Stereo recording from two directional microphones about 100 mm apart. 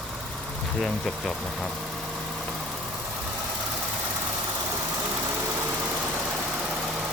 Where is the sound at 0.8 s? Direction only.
5° left (ahead or behind).